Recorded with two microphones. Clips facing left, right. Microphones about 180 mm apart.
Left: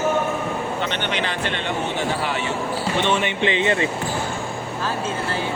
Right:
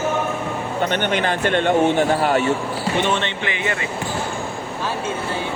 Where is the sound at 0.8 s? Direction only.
50° right (ahead or behind).